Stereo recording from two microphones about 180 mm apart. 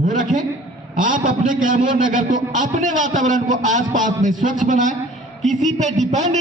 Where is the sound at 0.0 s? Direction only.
45° right (ahead or behind).